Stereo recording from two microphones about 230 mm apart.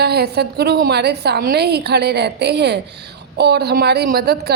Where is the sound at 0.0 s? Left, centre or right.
Right.